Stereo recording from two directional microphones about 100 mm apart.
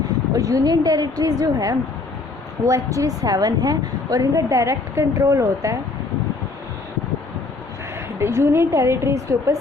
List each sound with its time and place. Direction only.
0.3 s a woman's voice: 35° right (ahead or behind)
8.2 s a woman's voice: 25° right (ahead or behind)